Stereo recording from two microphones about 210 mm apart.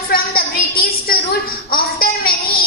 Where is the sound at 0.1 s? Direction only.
45° left (ahead or behind).